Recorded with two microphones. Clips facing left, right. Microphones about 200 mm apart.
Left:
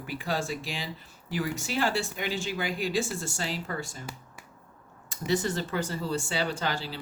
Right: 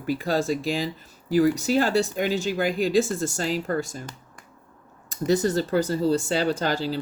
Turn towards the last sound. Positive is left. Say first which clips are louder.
# right 7 dB
turn(degrees=-40)  # may be behind; listen again after turning